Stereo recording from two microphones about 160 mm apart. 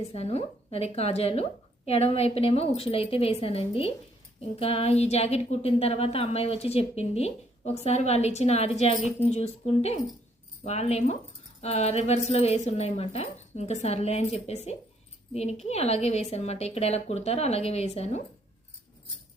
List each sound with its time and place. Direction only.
0.1 s a woman's voice: 40° left (ahead or behind)